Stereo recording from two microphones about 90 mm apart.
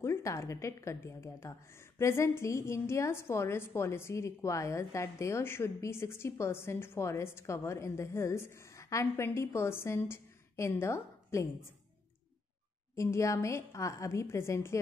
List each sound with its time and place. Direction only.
0.0 s a woman's voice: 35° left (ahead or behind)
12.9 s a woman's voice: 35° left (ahead or behind)